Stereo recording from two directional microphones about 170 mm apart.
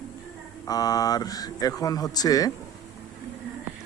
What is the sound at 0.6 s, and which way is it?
Speech, 20° left (ahead or behind).